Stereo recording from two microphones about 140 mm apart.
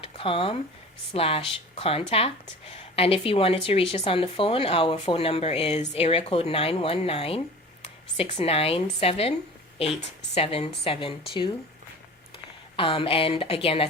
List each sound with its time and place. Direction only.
0.0 s a sound: 40° left (ahead or behind)
1.1 s speech: 45° left (ahead or behind)
12.7 s speech: 40° left (ahead or behind)